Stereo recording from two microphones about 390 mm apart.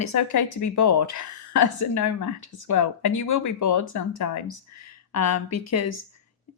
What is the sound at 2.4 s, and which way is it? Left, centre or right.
A woman's voice, left.